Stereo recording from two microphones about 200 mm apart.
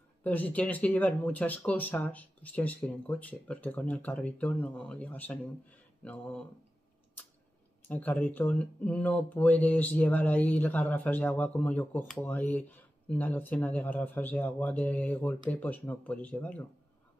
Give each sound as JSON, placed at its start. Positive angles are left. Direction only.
{"t": 0.2, "sound": "speech", "side_deg": 10}
{"t": 6.0, "sound": "a sound", "side_deg": 5}
{"t": 7.9, "sound": "speech", "side_deg": 10}